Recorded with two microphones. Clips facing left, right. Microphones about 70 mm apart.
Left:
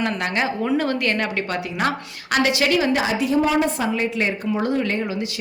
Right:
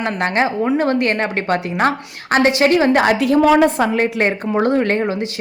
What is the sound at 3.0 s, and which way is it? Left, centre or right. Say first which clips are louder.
Speech: right 6 dB; right.